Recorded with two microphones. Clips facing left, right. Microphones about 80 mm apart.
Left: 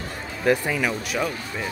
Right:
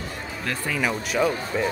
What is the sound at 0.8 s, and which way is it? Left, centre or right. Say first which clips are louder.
Speech: right 2 dB; centre.